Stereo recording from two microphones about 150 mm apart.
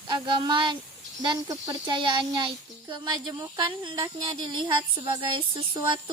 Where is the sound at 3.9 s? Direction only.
30° right (ahead or behind).